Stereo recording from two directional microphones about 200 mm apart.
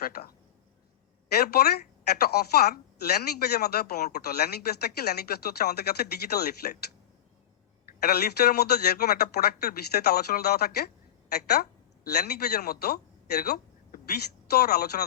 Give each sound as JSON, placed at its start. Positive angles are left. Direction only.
{"t": 0.0, "sound": "a sound", "side_deg": 50}
{"t": 1.3, "sound": "a woman's voice", "side_deg": 50}
{"t": 7.9, "sound": "a woman's voice", "side_deg": 50}